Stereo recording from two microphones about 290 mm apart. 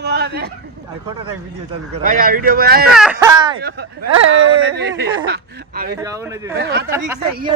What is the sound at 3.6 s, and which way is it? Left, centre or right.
Speech, right.